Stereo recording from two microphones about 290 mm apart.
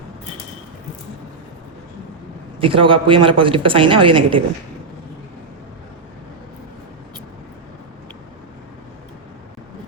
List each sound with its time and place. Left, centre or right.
2.6 s a woman's voice: centre